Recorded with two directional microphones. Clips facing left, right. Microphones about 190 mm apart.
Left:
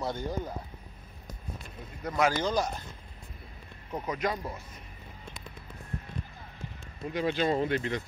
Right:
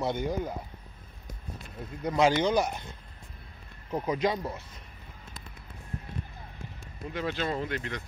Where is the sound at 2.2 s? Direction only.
20° right (ahead or behind).